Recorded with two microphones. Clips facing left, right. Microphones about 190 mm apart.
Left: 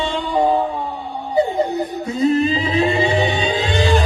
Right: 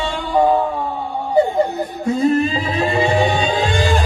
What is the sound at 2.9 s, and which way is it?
Music, 45° right (ahead or behind).